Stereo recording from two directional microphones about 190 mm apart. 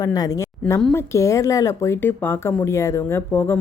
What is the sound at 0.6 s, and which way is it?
A woman's voice, 5° left (ahead or behind).